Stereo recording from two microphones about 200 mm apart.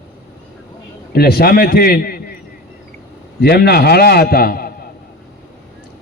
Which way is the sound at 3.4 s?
50° left (ahead or behind).